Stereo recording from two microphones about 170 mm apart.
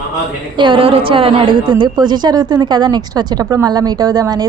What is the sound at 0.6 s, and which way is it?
A woman's voice, 30° right (ahead or behind).